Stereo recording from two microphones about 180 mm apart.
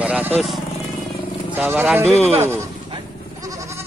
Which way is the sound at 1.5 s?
15° right (ahead or behind).